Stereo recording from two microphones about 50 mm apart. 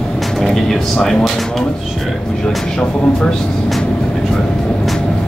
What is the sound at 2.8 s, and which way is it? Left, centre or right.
Speech, centre.